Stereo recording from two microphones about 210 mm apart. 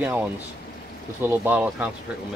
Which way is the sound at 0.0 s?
10° right (ahead or behind).